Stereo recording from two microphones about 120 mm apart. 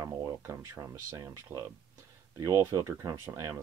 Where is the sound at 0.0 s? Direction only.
25° right (ahead or behind).